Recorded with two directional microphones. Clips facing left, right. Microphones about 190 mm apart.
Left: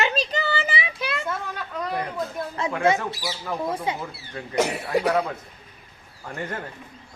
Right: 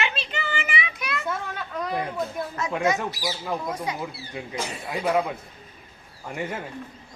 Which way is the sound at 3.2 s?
10° right (ahead or behind).